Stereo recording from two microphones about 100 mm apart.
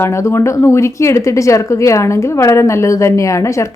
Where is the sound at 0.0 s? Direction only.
30° left (ahead or behind).